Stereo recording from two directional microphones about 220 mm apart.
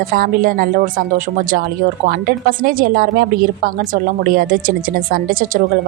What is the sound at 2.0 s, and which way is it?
A woman's voice, 40° right (ahead or behind).